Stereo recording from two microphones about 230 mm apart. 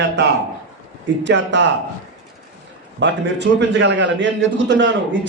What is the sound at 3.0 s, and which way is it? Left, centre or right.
A man's voice, right.